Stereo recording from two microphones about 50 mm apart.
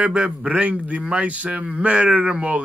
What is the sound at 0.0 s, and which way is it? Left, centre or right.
A man's voice, centre.